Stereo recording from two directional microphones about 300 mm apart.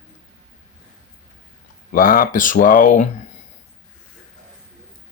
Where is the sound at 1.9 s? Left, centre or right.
Left.